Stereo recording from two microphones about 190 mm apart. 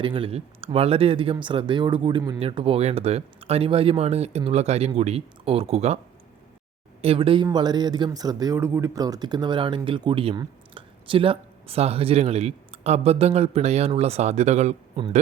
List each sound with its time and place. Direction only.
0.0 s speech: 25° right (ahead or behind)
7.0 s speech: 30° right (ahead or behind)